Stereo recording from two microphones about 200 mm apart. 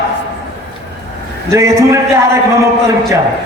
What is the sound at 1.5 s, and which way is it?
Music, 15° right (ahead or behind).